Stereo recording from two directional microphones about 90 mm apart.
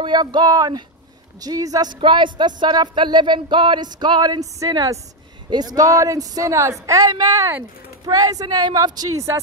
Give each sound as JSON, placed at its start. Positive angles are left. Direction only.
{"t": 0.0, "sound": "a woman's voice", "side_deg": -55}
{"t": 2.0, "sound": "a woman's voice", "side_deg": -65}